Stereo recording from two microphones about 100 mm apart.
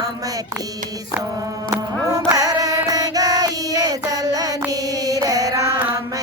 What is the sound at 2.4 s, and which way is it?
Female singing, 40° right (ahead or behind).